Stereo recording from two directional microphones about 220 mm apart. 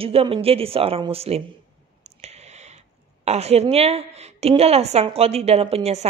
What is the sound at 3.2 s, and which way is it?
A woman's voice, 30° right (ahead or behind).